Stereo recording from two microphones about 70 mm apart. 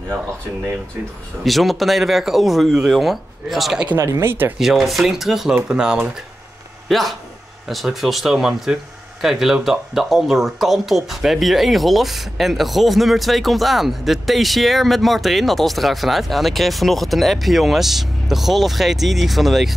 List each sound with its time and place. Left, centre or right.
1.4 s speech: centre
4.0 s speech: right
4.3 s speech: right
4.6 s speech: centre
6.9 s speech: centre